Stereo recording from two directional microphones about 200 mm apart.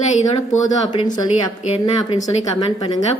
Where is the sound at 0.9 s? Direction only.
20° left (ahead or behind).